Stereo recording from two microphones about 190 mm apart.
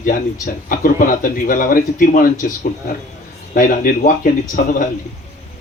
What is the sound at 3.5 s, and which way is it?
Speech, 45° left (ahead or behind).